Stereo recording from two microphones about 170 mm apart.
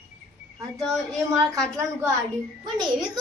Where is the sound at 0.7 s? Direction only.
5° left (ahead or behind).